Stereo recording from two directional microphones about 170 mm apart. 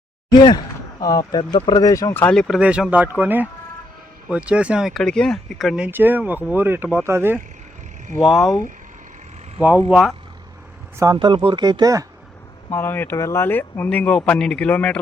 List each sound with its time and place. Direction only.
0.3 s a sound: 25° left (ahead or behind)
1.2 s speech: 30° left (ahead or behind); by 2.6 s 5° left (ahead or behind)
2.6 s speech: 5° right (ahead or behind)
8.4 s speech: 15° left (ahead or behind)
9.9 s speech: centre (ahead or behind)
11.0 s speech: 25° right (ahead or behind)
12.7 s speech: 15° left (ahead or behind)